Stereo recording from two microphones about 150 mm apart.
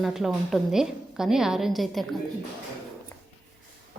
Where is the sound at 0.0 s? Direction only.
Centre (ahead or behind).